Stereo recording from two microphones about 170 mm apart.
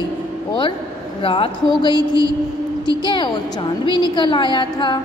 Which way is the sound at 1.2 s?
30° left (ahead or behind).